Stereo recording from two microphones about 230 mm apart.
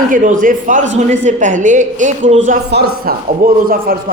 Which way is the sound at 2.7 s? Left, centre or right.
Right.